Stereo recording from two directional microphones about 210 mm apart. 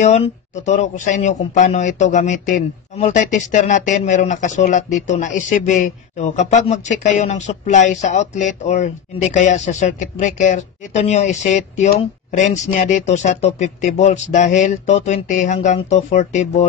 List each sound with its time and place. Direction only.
0.0 s speech: 35° left (ahead or behind)